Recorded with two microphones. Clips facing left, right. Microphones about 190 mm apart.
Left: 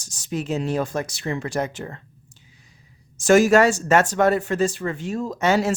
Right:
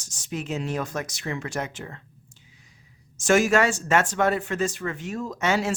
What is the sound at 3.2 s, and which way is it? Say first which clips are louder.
Speech: left 5 dB; 35° left (ahead or behind).